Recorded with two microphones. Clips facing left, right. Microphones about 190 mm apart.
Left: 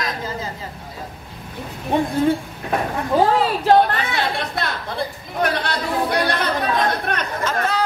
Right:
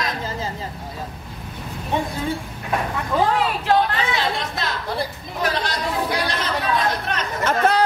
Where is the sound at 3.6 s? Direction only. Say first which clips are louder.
Left 5 dB; 55° left (ahead or behind).